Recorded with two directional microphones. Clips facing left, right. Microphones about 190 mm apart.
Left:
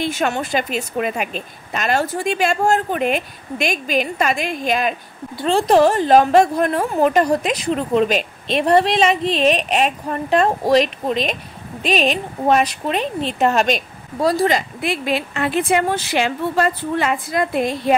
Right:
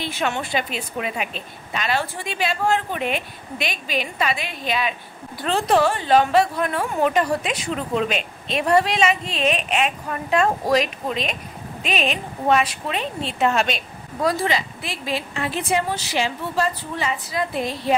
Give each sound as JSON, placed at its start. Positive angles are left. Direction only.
{"t": 0.0, "sound": "a woman's voice", "side_deg": 45}
{"t": 5.4, "sound": "a woman's voice", "side_deg": 30}
{"t": 14.8, "sound": "a woman's voice", "side_deg": 60}